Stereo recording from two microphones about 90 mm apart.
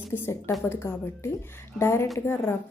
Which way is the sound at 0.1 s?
25° left (ahead or behind).